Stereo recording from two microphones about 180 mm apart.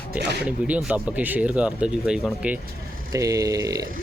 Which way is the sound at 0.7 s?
10° right (ahead or behind).